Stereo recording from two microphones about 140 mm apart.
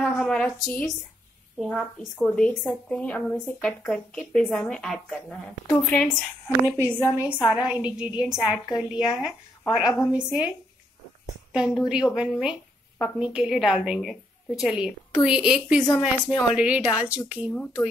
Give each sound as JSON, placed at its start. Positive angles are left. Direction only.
{"t": 0.0, "sound": "a woman's voice", "side_deg": 5}
{"t": 6.6, "sound": "a woman's voice", "side_deg": -15}
{"t": 11.5, "sound": "a woman's voice", "side_deg": -5}